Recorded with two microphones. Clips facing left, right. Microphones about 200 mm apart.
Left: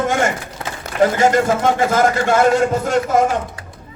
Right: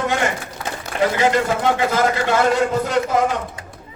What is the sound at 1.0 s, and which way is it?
A man's voice, 45° left (ahead or behind).